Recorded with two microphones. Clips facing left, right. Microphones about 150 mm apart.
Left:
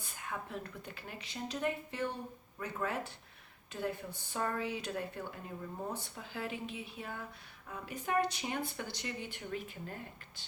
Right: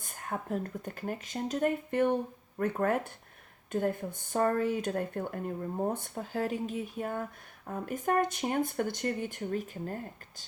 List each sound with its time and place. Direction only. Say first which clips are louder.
0.0 s speech: right 5 dB; 45° right (ahead or behind)